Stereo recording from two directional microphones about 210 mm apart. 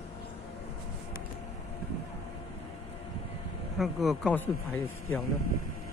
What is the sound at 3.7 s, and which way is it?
Speech, centre (ahead or behind).